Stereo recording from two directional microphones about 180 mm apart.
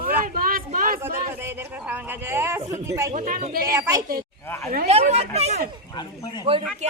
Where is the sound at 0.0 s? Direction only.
50° right (ahead or behind).